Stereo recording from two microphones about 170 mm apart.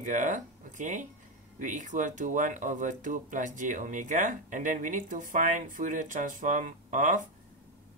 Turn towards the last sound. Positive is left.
turn(degrees=-50)  # may be behind; listen again after turning